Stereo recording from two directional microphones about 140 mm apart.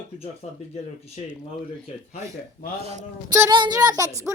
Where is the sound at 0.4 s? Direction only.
55° left (ahead or behind).